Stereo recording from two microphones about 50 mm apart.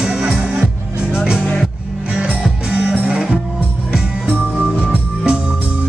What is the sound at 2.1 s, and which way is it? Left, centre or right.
Music, right.